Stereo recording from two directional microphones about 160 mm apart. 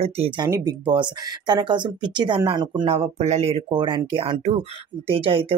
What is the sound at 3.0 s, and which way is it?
Speech, 40° right (ahead or behind).